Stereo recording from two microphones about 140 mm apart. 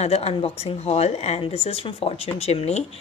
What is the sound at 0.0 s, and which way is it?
A woman's voice, 45° left (ahead or behind).